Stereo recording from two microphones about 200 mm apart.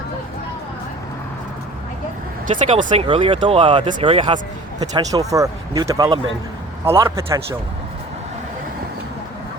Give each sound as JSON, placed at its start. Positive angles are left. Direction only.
{"t": 2.6, "sound": "a man's voice", "side_deg": -30}